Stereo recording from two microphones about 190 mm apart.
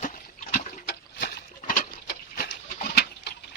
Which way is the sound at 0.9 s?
55° left (ahead or behind).